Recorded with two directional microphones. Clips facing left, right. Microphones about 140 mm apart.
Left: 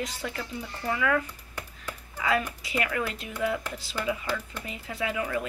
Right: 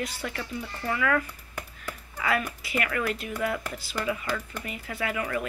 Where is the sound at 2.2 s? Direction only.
20° left (ahead or behind).